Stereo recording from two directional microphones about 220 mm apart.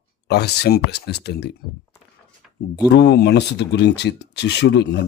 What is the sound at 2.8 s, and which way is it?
Speech, 50° left (ahead or behind).